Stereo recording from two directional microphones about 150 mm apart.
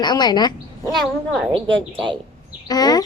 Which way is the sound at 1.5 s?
35° right (ahead or behind).